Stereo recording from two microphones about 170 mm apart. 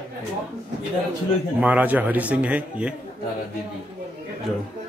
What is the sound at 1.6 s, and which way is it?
A man's voice, 10° right (ahead or behind).